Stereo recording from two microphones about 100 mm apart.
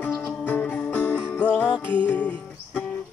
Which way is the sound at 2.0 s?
15° left (ahead or behind).